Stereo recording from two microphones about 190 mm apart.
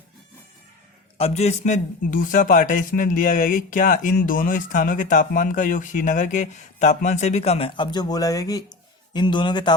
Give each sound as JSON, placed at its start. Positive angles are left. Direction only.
{"t": 1.2, "sound": "a man's voice", "side_deg": 35}